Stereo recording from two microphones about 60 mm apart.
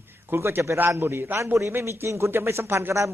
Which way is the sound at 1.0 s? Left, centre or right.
Right.